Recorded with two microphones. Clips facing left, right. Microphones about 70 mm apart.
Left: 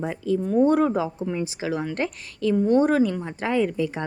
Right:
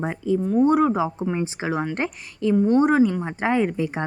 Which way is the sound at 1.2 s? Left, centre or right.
Right.